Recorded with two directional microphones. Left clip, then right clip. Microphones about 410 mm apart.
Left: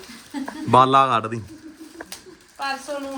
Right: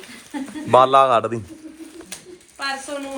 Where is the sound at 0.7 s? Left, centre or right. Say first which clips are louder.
Right 2 dB; centre.